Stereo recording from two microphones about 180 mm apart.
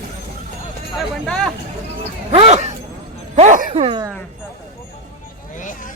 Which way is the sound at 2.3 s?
40° right (ahead or behind).